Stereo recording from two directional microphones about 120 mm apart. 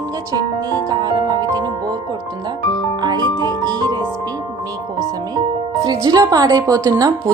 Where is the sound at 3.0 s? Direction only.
40° right (ahead or behind).